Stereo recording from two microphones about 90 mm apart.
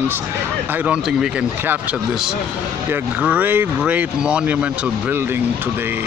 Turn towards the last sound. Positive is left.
turn(degrees=-20)  # may be behind; listen again after turning